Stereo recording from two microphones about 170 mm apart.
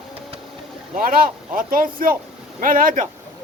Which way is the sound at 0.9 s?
55° right (ahead or behind).